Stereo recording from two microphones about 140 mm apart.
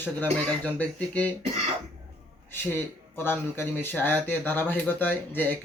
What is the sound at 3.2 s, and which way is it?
Speech, 15° left (ahead or behind).